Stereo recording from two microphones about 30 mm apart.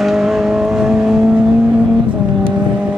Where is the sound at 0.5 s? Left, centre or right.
Right.